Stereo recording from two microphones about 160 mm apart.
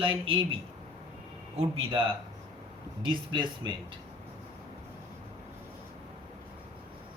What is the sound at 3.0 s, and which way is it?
Speech, 30° right (ahead or behind).